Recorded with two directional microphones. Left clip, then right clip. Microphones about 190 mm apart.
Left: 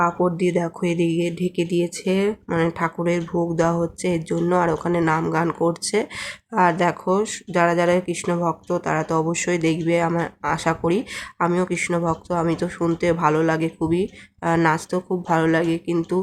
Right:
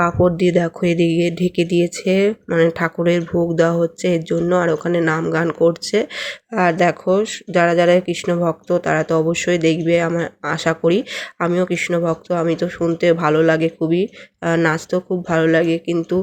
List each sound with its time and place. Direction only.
0.0 s speech: 15° right (ahead or behind)